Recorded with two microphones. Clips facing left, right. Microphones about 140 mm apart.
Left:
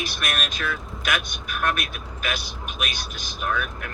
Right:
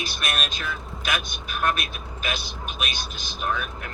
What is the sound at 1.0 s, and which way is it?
Speech, 25° right (ahead or behind).